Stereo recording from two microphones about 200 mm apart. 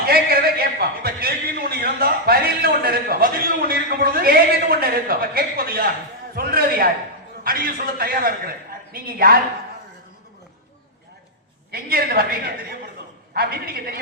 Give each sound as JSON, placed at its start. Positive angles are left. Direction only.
{"t": 0.1, "sound": "a sound", "side_deg": -50}
{"t": 7.4, "sound": "a man's voice", "side_deg": -45}
{"t": 11.7, "sound": "a man's voice", "side_deg": -50}